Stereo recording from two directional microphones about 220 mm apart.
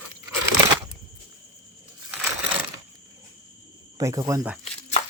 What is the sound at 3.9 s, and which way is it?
Speech, 15° right (ahead or behind).